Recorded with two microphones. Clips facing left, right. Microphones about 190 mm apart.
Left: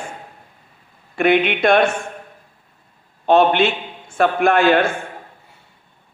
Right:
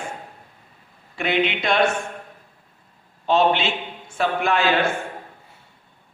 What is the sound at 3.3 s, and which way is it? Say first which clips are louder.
A man's voice: left 5 dB; 55° left (ahead or behind).